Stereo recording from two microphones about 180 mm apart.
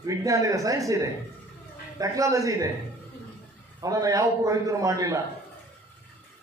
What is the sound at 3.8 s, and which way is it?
A man's voice, 20° right (ahead or behind).